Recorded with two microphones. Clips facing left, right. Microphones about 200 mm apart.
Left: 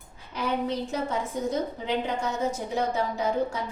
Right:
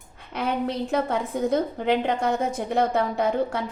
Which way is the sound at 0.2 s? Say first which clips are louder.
Right 2 dB; 60° right (ahead or behind).